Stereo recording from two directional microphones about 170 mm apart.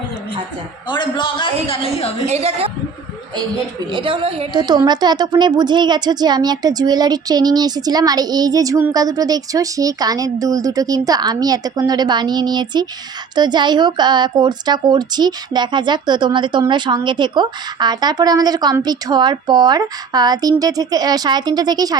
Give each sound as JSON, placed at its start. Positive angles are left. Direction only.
{"t": 0.9, "sound": "a man's voice", "side_deg": 25}
{"t": 2.2, "sound": "a woman's voice", "side_deg": -40}
{"t": 3.3, "sound": "a woman's voice", "side_deg": -25}